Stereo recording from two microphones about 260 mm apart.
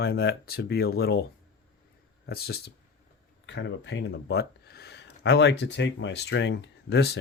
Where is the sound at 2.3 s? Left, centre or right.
Left.